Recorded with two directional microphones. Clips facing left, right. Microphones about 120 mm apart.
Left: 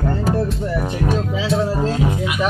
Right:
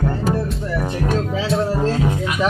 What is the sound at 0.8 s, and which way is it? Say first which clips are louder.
Speech: right 1 dB; 10° left (ahead or behind).